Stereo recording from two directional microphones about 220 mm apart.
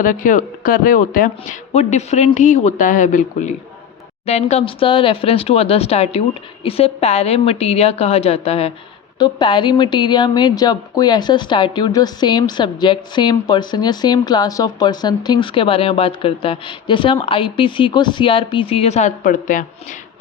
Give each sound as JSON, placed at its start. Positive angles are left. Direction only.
{"t": 0.0, "sound": "a woman's voice", "side_deg": 40}